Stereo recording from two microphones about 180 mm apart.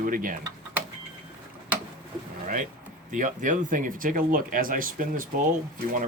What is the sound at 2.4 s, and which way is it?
Vehicle, 45° right (ahead or behind).